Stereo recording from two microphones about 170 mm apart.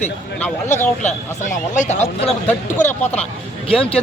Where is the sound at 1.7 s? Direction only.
45° left (ahead or behind).